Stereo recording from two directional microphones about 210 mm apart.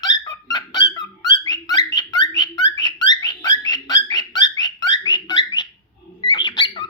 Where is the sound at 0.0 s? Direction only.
20° left (ahead or behind).